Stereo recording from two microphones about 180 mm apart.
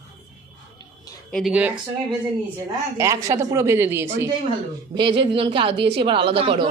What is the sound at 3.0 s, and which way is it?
Speech, 15° right (ahead or behind).